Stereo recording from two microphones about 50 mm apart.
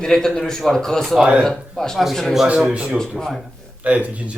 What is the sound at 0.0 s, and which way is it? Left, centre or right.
A man's voice, centre.